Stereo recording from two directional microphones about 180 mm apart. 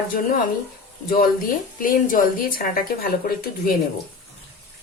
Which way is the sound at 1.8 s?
50° left (ahead or behind).